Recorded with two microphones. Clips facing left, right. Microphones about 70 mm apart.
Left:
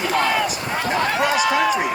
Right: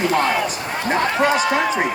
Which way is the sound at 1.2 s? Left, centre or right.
Right.